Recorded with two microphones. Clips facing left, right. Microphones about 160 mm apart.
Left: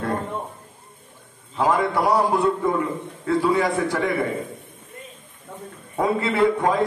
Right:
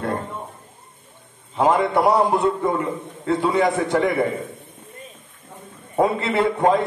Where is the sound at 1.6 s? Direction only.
25° right (ahead or behind).